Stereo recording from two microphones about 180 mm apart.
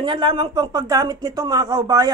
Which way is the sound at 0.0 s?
25° right (ahead or behind).